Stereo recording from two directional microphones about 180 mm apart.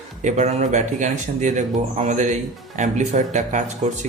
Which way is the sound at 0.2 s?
40° right (ahead or behind).